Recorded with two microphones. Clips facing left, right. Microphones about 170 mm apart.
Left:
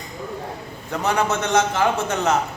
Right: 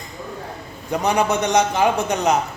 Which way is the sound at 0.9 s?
15° right (ahead or behind).